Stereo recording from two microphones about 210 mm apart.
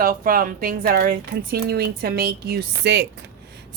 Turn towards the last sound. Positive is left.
turn(degrees=-50)  # may be behind; listen again after turning